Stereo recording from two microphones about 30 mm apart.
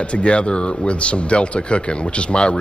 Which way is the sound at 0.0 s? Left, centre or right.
Left.